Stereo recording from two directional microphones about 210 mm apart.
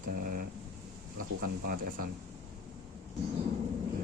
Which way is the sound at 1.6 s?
40° right (ahead or behind).